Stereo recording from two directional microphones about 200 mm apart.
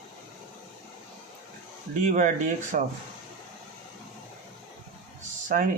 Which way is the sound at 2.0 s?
40° right (ahead or behind).